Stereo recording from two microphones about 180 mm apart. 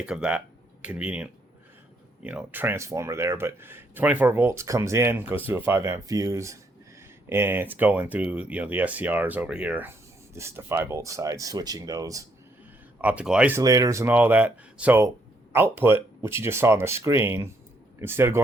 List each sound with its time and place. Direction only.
0.0 s speech: 5° right (ahead or behind)
13.0 s speech: 5° right (ahead or behind)
13.6 s speech: 20° right (ahead or behind)